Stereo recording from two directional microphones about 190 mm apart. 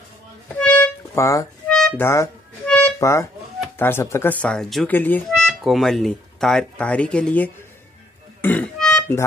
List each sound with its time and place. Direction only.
0.5 s music: 5° left (ahead or behind)
1.7 s music: 5° left (ahead or behind)
2.0 s harmonica: 10° left (ahead or behind)
3.0 s speech: 15° left (ahead or behind)
8.4 s music: 10° left (ahead or behind)